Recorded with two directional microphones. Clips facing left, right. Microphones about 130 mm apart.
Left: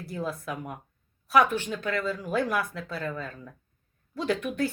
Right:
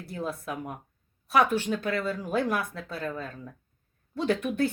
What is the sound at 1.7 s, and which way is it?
Speech, 30° right (ahead or behind).